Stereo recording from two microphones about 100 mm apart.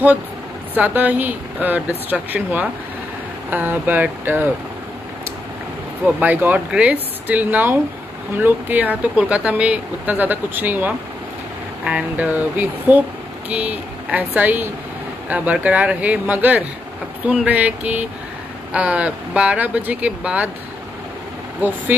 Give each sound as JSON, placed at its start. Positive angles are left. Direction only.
{"t": 0.7, "sound": "speech", "side_deg": -15}
{"t": 6.0, "sound": "speech", "side_deg": -15}